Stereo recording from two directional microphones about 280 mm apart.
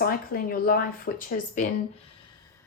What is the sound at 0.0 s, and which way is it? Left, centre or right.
Speech, left.